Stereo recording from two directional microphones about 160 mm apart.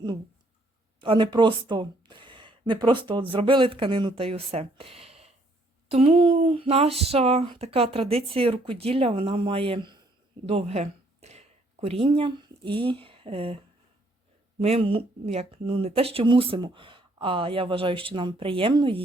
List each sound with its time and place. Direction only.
1.0 s speech: 30° right (ahead or behind)
14.6 s speech: 40° right (ahead or behind)